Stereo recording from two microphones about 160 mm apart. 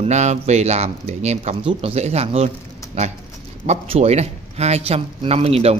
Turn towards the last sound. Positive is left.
turn(degrees=-40)  # may be behind; listen again after turning